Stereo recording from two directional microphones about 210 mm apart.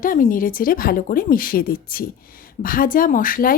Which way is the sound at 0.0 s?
40° left (ahead or behind).